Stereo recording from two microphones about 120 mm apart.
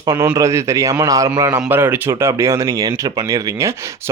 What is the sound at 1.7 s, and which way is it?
Speech, 15° right (ahead or behind).